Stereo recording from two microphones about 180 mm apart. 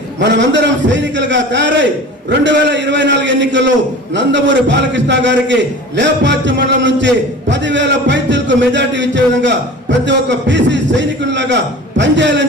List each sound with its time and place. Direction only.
0.2 s a man's voice: 75° right (ahead or behind)